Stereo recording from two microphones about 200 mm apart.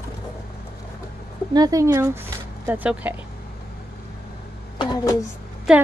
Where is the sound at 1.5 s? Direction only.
20° right (ahead or behind).